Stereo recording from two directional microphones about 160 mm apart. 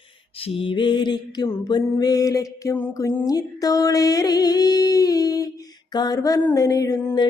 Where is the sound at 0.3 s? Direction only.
35° left (ahead or behind).